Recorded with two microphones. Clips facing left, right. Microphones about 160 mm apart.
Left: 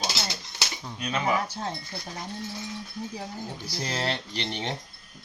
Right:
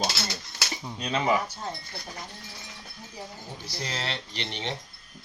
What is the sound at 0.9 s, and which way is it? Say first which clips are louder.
Speech: right 2 dB; 25° right (ahead or behind).